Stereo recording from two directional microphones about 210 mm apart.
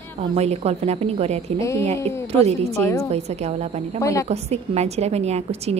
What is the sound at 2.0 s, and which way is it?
Speech, 10° left (ahead or behind).